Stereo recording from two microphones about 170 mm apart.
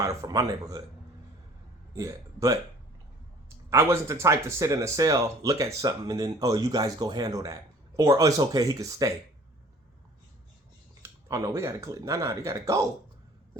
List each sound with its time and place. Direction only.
0.0 s speech: 20° right (ahead or behind)
2.0 s speech: 20° right (ahead or behind)
3.7 s speech: 15° right (ahead or behind)
11.0 s speech: 20° right (ahead or behind)